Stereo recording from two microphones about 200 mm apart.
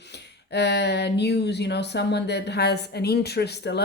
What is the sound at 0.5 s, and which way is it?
Speech, 55° left (ahead or behind).